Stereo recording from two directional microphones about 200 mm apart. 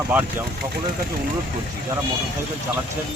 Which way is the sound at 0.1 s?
10° right (ahead or behind).